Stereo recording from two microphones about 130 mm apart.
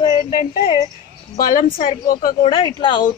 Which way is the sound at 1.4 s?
90° left.